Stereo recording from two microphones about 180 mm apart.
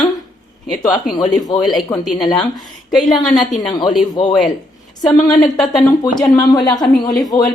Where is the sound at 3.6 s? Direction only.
25° left (ahead or behind).